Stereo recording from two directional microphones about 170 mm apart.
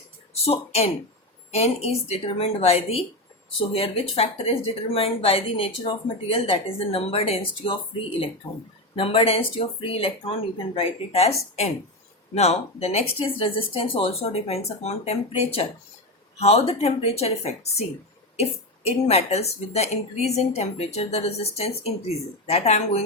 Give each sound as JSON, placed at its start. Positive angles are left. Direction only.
{"t": 0.3, "sound": "speech", "side_deg": 35}
{"t": 18.9, "sound": "speech", "side_deg": 40}